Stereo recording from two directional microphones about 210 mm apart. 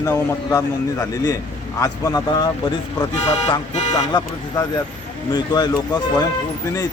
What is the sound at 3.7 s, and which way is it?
Speech, 35° left (ahead or behind).